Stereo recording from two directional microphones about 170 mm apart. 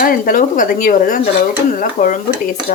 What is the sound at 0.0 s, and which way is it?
A woman's voice, 50° left (ahead or behind).